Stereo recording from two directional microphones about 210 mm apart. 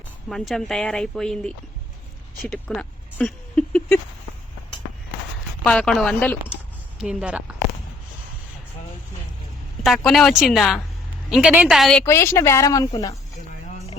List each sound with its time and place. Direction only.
0.3 s speech: centre (ahead or behind)
5.6 s speech: 5° left (ahead or behind)
7.0 s speech: 5° right (ahead or behind)
9.8 s a woman's voice: centre (ahead or behind); by 13.1 s 15° left (ahead or behind)